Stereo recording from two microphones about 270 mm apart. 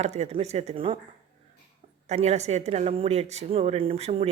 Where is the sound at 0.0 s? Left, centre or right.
Right.